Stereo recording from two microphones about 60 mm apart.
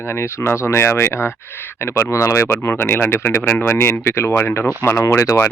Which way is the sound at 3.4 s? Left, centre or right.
Left.